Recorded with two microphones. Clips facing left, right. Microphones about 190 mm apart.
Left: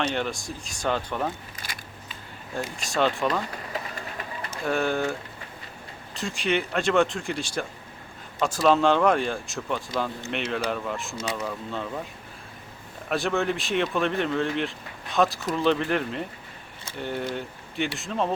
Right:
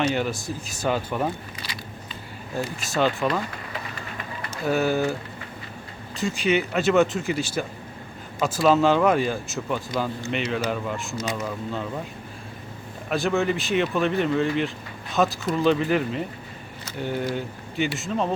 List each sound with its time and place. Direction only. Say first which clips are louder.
0.0 s speech: right 3 dB; 5° right (ahead or behind)
1.6 s scissors: right 1 dB; 50° left (ahead or behind)
2.6 s speech: right 1 dB; 5° right (ahead or behind)
4.6 s speech: right 3 dB; 5° right (ahead or behind)
6.1 s speech: right 4 dB; centre (ahead or behind)
13.1 s speech: right 2 dB; centre (ahead or behind)